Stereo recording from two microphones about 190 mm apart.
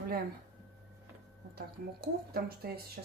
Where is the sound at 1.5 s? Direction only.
55° right (ahead or behind).